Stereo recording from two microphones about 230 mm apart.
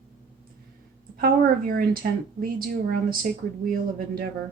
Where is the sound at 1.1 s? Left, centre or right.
Right.